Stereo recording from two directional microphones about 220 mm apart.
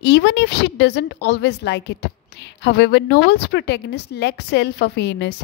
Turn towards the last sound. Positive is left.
turn(degrees=50)  # may be behind; listen again after turning